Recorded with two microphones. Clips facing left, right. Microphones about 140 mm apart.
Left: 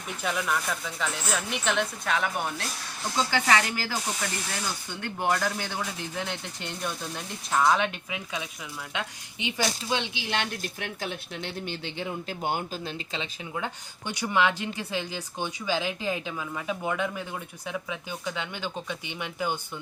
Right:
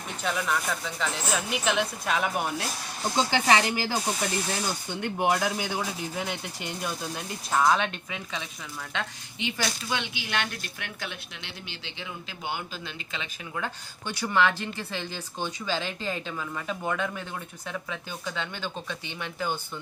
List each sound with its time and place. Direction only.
0.2 s speech: 5° left (ahead or behind)
3.0 s speech: 25° right (ahead or behind); by 12.9 s 40° left (ahead or behind)
13.1 s speech: 20° left (ahead or behind)